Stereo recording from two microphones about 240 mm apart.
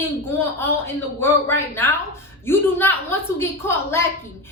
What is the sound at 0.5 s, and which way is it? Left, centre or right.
A woman's voice, centre.